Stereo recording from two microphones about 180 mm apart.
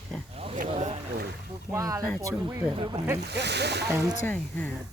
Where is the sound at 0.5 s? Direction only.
40° right (ahead or behind).